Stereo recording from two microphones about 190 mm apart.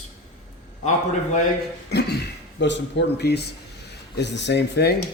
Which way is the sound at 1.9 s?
60° left (ahead or behind).